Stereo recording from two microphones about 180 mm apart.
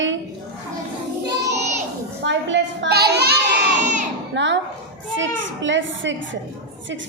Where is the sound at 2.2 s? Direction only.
80° right; by 3.3 s 65° right (ahead or behind).